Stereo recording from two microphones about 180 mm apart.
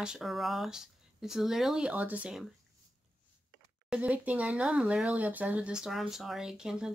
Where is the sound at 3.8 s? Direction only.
5° right (ahead or behind).